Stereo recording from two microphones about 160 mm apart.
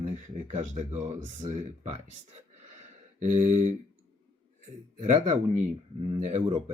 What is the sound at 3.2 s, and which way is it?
Speech, 50° right (ahead or behind).